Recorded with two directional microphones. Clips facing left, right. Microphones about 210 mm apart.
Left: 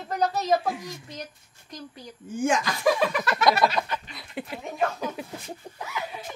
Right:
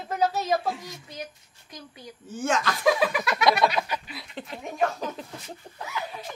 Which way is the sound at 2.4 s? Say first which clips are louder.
Left 2 dB; 15° left (ahead or behind).